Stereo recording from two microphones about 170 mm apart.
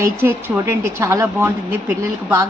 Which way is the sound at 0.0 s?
15° right (ahead or behind).